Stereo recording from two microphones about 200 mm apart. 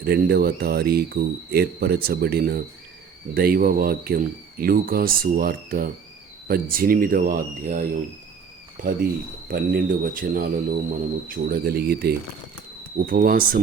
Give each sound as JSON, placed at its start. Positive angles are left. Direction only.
{"t": 0.0, "sound": "speech", "side_deg": -50}